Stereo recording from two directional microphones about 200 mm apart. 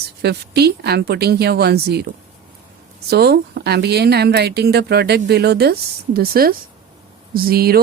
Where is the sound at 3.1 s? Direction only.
55° right (ahead or behind).